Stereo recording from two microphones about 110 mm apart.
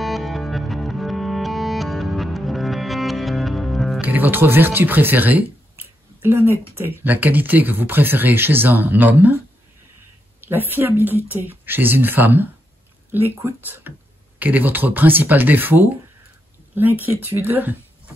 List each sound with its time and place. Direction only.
0.0 s music: centre (ahead or behind)
4.0 s speech: 15° right (ahead or behind)
10.4 s speech: 20° right (ahead or behind)